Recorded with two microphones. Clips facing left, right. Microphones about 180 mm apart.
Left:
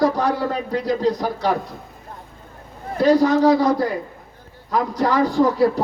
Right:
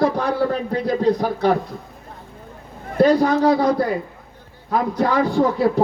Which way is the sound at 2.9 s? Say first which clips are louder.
Even; 55° right (ahead or behind).